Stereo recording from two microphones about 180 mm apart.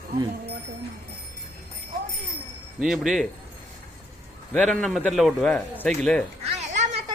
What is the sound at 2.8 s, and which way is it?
Speech, 5° right (ahead or behind).